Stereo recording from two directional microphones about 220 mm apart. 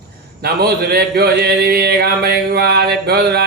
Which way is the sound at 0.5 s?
45° right (ahead or behind).